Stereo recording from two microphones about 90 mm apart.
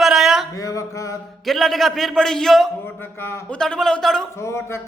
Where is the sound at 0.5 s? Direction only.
40° left (ahead or behind).